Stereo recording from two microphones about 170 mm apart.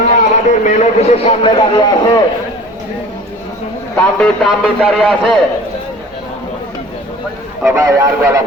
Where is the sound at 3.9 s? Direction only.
Centre (ahead or behind).